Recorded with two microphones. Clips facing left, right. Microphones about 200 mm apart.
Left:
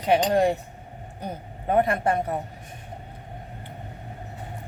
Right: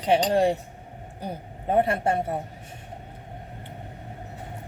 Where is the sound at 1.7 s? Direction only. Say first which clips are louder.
Left 1 dB; 30° right (ahead or behind).